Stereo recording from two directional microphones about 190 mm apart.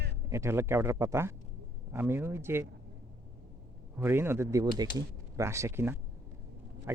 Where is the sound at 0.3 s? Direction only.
15° right (ahead or behind).